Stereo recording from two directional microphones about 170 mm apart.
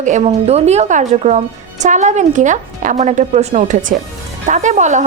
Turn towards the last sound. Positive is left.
turn(degrees=-45)  # may be behind; listen again after turning